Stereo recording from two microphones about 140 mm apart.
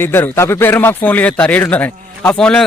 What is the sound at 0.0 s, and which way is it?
Speech, 15° left (ahead or behind).